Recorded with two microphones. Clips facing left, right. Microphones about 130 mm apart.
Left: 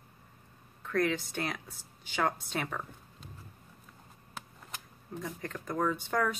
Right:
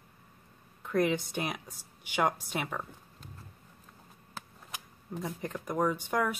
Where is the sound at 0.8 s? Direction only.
20° right (ahead or behind).